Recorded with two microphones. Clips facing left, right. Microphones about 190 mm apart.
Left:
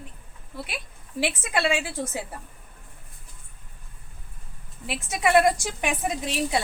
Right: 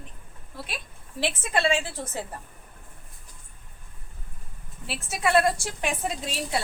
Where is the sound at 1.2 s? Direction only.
10° left (ahead or behind).